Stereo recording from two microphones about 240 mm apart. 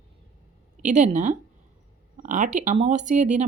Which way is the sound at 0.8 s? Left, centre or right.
Right.